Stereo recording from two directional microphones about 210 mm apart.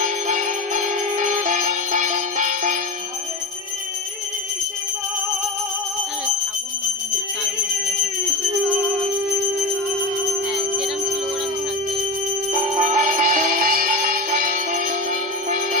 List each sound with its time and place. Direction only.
0.0 s music: 35° right (ahead or behind)
12.6 s music: 35° right (ahead or behind)